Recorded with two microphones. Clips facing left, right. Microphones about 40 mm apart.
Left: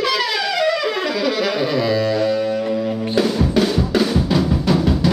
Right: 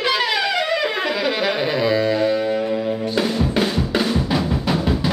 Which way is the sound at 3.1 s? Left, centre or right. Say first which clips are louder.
Left 4 dB; centre.